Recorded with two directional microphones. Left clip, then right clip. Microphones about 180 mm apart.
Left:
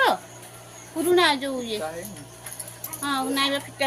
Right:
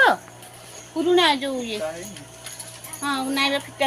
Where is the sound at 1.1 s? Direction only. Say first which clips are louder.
Right 1 dB; 25° right (ahead or behind).